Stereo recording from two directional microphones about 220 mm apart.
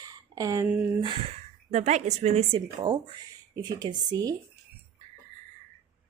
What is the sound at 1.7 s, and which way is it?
Speech, 30° right (ahead or behind).